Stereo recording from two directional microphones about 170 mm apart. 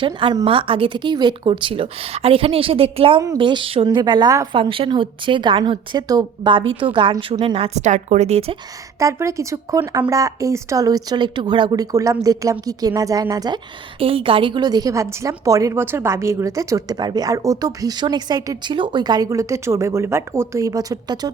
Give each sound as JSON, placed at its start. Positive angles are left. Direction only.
{"t": 0.0, "sound": "a woman's voice", "side_deg": -30}
{"t": 9.0, "sound": "a woman's voice", "side_deg": -20}